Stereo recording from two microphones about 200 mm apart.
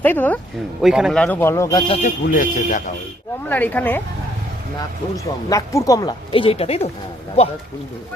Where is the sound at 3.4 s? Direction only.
10° left (ahead or behind).